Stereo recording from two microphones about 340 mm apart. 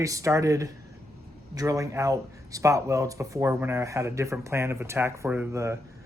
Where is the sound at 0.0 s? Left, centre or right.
Centre.